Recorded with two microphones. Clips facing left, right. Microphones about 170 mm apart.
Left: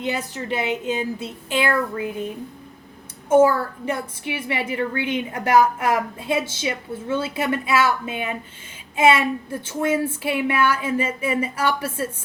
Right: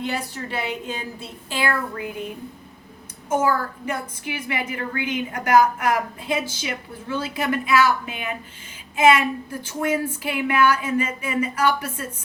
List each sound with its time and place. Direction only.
0.0 s a woman's voice: 20° left (ahead or behind)
3.2 s a woman's voice: 30° left (ahead or behind)